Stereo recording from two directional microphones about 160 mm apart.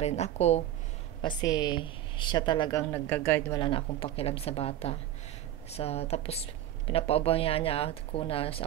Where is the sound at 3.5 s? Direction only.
30° left (ahead or behind).